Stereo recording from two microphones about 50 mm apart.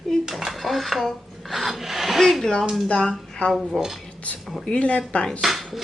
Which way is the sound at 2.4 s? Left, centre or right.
Centre.